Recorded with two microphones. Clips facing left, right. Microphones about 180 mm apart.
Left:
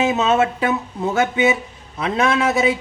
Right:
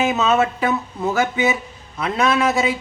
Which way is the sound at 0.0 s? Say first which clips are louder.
Left 1 dB; 25° left (ahead or behind).